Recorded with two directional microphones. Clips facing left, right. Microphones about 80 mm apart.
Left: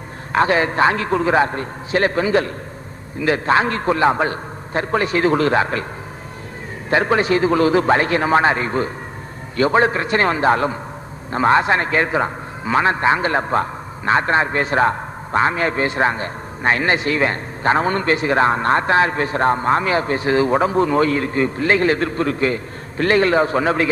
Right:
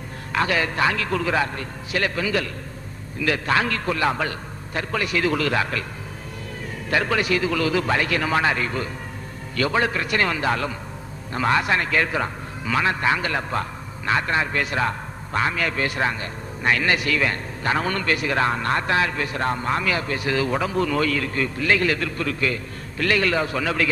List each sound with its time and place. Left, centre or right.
0.3 s a man's voice: left
6.9 s a man's voice: left